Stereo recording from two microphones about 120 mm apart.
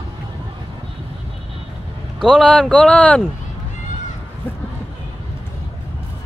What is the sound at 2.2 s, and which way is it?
Speech, 5° left (ahead or behind).